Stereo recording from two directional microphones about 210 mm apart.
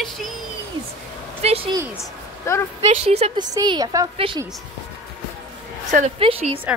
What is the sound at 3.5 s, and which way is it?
Speech, 20° right (ahead or behind).